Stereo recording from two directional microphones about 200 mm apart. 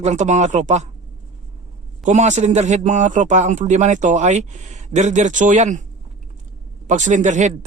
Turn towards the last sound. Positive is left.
turn(degrees=-35)  # may be behind; listen again after turning